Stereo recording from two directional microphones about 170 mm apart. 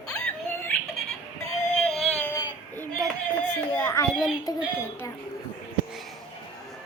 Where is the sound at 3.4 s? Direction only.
15° left (ahead or behind).